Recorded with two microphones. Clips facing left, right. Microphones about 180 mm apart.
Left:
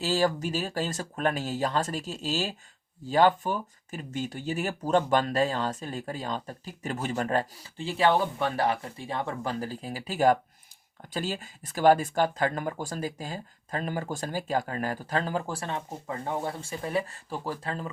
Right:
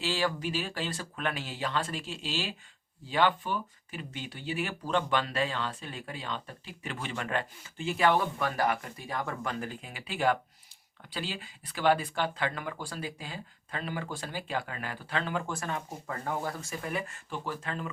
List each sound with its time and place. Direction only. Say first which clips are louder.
0.0 s speech: left 5 dB; 40° left (ahead or behind)